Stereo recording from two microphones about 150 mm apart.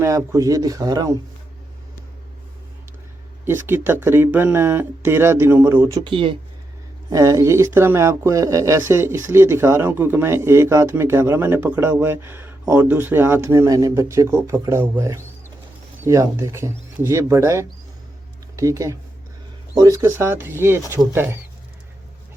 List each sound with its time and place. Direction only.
0.0 s speech: 15° right (ahead or behind)
3.4 s speech: 15° right (ahead or behind)
6.1 s speech: 35° right (ahead or behind)
7.1 s speech: 20° right (ahead or behind)